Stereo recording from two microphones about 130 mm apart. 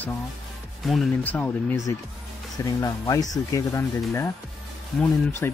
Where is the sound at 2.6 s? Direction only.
25° left (ahead or behind).